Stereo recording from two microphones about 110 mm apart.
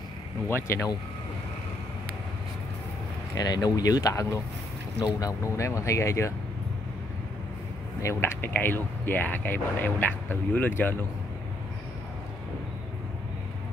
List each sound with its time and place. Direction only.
0.5 s speech: 25° left (ahead or behind)
3.3 s speech: 35° left (ahead or behind)
8.0 s speech: 25° left (ahead or behind)